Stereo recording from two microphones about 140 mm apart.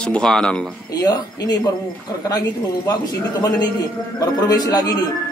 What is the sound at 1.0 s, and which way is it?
A man's voice, 25° left (ahead or behind).